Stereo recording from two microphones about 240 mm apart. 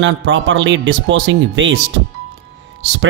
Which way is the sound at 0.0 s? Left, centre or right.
Right.